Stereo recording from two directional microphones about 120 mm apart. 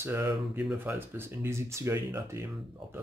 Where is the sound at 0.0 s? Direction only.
20° right (ahead or behind).